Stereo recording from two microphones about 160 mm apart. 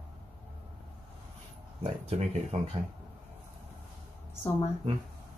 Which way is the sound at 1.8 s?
40° right (ahead or behind).